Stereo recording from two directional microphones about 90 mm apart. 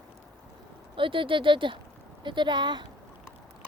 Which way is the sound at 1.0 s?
70° right (ahead or behind).